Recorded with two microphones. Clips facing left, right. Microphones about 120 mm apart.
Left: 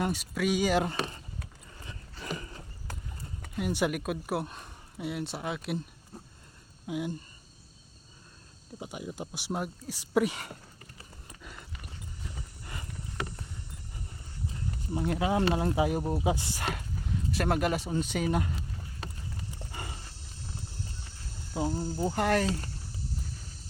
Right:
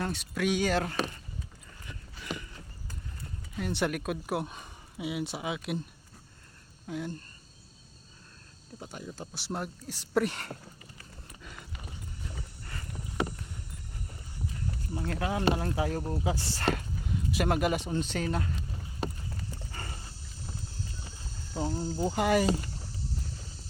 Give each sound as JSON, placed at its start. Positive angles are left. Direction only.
{"t": 0.0, "sound": "speech", "side_deg": 5}
{"t": 2.2, "sound": "a sound", "side_deg": 40}
{"t": 2.9, "sound": "clip-clop", "side_deg": 85}
{"t": 3.5, "sound": "speech", "side_deg": 10}
{"t": 8.8, "sound": "speech", "side_deg": 10}
{"t": 11.4, "sound": "dog", "side_deg": 0}
{"t": 14.8, "sound": "speech", "side_deg": 20}
{"t": 16.6, "sound": "speech", "side_deg": 0}
{"t": 21.5, "sound": "speech", "side_deg": 15}
{"t": 22.0, "sound": "speech", "side_deg": -5}